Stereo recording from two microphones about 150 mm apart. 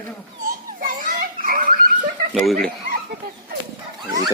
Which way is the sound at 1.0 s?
70° right (ahead or behind).